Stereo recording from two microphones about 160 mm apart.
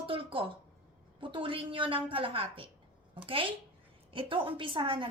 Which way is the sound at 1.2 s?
30° right (ahead or behind).